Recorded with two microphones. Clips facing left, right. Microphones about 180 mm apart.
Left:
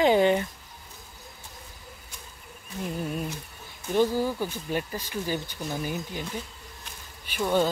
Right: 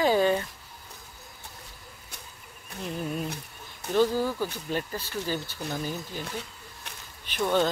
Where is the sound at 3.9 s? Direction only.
15° left (ahead or behind).